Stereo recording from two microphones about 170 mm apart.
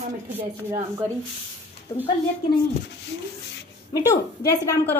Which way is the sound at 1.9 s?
20° left (ahead or behind).